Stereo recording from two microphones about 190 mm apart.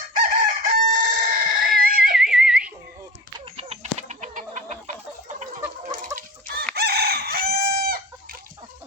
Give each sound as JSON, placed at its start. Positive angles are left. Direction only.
{"t": 0.1, "sound": "chicken", "side_deg": -45}
{"t": 2.1, "sound": "a sound", "side_deg": 0}
{"t": 3.3, "sound": "chicken", "side_deg": -30}
{"t": 5.4, "sound": "fowl", "side_deg": -40}
{"t": 6.1, "sound": "chicken", "side_deg": -55}